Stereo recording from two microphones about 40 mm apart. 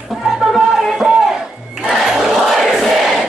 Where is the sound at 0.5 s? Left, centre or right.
Centre.